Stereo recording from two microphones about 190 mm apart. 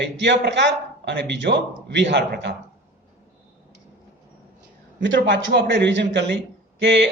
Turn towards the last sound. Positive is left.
turn(degrees=-65)  # may be behind; listen again after turning